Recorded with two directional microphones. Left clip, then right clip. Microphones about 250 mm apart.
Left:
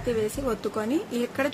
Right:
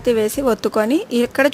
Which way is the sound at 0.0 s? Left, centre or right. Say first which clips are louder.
Right 10 dB; right.